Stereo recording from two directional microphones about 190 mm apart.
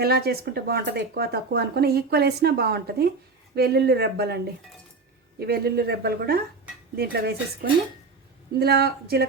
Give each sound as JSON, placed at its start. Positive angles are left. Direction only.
{"t": 0.0, "sound": "speech", "side_deg": -55}
{"t": 5.4, "sound": "speech", "side_deg": -55}